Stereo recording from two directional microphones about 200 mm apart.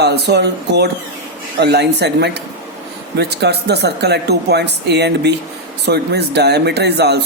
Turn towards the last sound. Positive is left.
turn(degrees=-55)  # may be behind; listen again after turning